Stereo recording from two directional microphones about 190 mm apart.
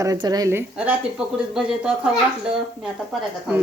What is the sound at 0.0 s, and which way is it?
Speech, 20° right (ahead or behind).